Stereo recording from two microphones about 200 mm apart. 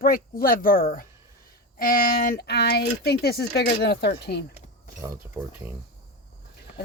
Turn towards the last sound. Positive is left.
turn(degrees=-10)  # may be behind; listen again after turning